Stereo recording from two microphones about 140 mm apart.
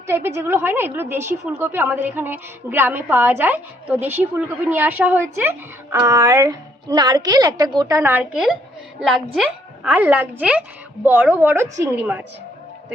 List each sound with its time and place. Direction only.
0.1 s a woman's voice: 20° right (ahead or behind)
8.1 s a woman's voice: 5° right (ahead or behind)